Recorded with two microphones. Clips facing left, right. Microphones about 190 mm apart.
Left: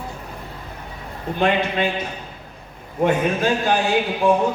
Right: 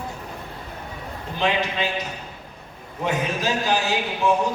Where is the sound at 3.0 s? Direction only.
55° left (ahead or behind).